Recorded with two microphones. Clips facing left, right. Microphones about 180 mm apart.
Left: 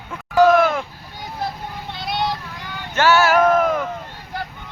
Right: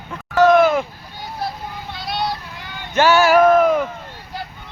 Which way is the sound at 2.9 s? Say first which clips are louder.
Right 2 dB; 15° right (ahead or behind).